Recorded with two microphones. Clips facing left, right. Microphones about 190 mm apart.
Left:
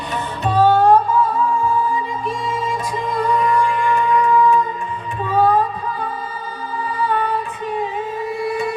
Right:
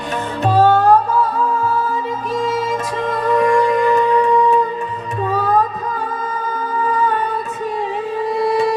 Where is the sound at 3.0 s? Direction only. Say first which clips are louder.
Right 3 dB; 90° right.